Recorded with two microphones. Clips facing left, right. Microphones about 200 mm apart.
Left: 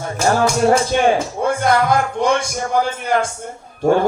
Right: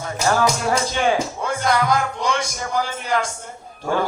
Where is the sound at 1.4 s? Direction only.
55° left (ahead or behind).